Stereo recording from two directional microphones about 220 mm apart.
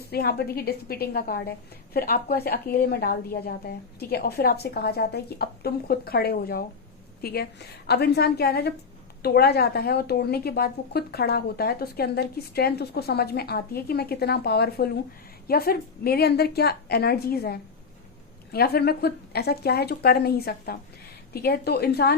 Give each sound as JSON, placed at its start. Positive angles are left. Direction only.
{"t": 0.1, "sound": "a woman's voice", "side_deg": 45}